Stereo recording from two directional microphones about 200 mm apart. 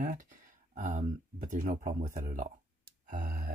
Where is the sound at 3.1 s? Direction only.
45° right (ahead or behind).